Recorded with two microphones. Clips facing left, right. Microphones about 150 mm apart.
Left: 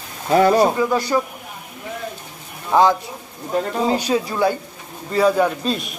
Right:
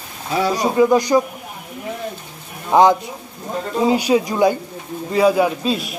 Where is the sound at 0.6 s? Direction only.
15° right (ahead or behind).